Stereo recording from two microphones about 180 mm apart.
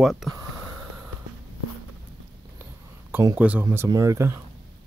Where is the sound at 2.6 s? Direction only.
10° right (ahead or behind).